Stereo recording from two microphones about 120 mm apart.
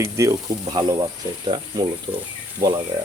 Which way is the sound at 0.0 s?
25° right (ahead or behind).